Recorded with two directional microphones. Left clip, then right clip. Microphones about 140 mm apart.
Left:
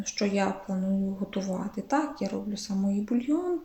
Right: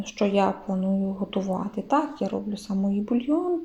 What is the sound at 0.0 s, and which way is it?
Speech, 15° right (ahead or behind).